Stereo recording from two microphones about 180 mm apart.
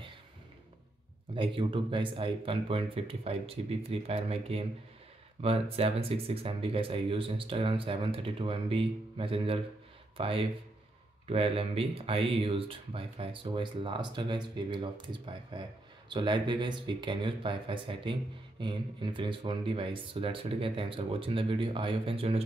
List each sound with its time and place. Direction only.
1.3 s speech: 30° right (ahead or behind)